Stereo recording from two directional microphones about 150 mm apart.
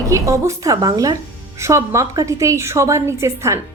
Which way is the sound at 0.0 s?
20° right (ahead or behind).